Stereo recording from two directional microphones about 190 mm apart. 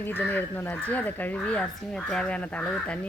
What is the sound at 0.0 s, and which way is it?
Speech, 10° left (ahead or behind).